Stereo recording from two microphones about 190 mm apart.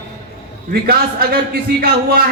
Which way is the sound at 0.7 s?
55° right (ahead or behind).